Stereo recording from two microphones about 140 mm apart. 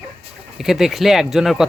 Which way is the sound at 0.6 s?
5° right (ahead or behind).